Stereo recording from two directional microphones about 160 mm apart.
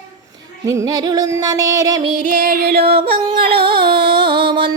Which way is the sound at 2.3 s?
70° right (ahead or behind).